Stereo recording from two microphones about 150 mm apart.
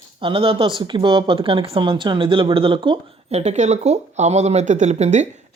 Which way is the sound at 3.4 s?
50° right (ahead or behind).